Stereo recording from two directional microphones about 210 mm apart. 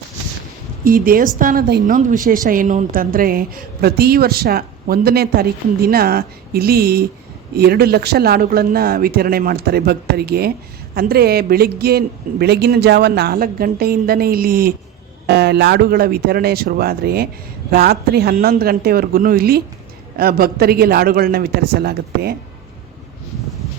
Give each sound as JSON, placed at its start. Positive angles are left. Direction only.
{"t": 0.9, "sound": "a woman's voice", "side_deg": -45}